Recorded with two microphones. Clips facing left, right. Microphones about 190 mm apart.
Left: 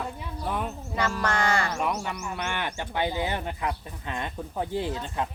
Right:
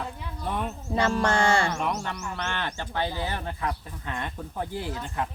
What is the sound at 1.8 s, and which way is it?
Speech, 5° left (ahead or behind).